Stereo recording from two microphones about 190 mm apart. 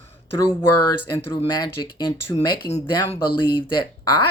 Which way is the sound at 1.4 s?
20° left (ahead or behind).